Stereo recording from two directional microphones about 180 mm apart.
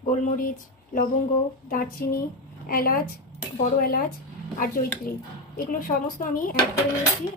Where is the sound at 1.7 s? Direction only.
55° left (ahead or behind).